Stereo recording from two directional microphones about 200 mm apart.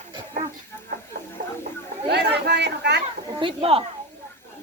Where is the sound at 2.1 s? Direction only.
55° right (ahead or behind).